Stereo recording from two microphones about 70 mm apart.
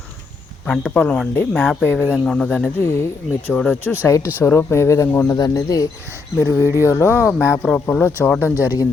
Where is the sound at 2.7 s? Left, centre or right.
Left.